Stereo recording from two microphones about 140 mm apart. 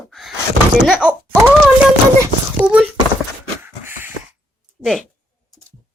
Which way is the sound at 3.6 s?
15° right (ahead or behind).